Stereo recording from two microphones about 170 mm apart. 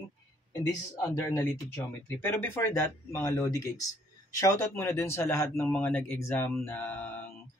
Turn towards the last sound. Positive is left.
turn(degrees=10)  # may be behind; listen again after turning